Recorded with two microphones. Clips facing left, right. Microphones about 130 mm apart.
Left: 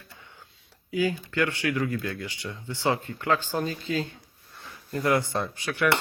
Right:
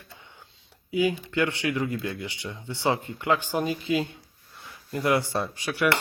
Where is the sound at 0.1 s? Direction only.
20° right (ahead or behind).